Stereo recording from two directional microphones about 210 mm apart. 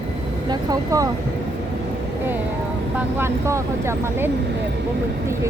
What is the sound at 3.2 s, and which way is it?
Speech, 10° right (ahead or behind).